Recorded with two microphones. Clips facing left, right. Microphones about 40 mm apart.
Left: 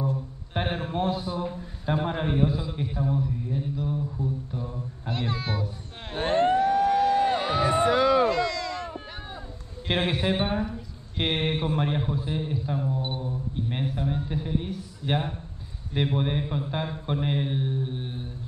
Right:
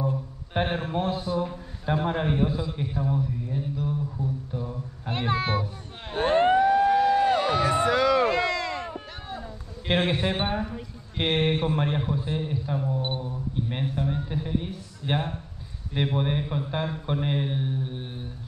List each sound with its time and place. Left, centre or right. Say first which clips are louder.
0.6 s a man's voice: right 1 dB; centre
5.1 s speech: right 4 dB; right
6.3 s emergency vehicle: right 2 dB; right
7.0 s crowd: right 1 dB; centre
8.3 s a sound: right 1 dB; right
9.8 s a man's voice: right 1 dB; centre
13.2 s a sound: even; centre
15.9 s a man's voice: even; centre